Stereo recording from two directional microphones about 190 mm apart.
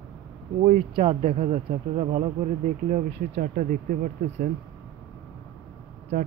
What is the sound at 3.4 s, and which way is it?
Speech, 45° right (ahead or behind).